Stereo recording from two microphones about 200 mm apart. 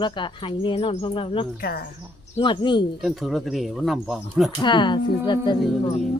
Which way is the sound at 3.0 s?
Centre (ahead or behind).